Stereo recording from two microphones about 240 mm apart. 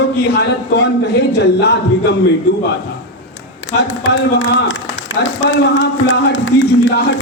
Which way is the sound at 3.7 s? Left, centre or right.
Left.